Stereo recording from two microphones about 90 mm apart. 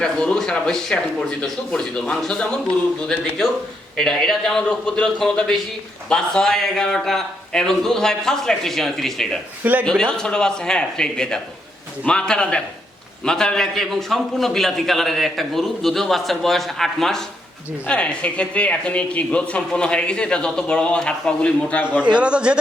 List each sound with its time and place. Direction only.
0.0 s a man's voice: 10° left (ahead or behind)
9.6 s a man's voice: 15° right (ahead or behind)
10.1 s a man's voice: 10° left (ahead or behind)
22.0 s a man's voice: 10° right (ahead or behind)